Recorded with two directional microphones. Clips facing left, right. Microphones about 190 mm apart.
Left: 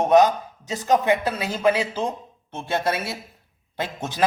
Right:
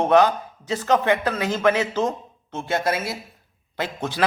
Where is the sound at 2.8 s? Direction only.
25° left (ahead or behind).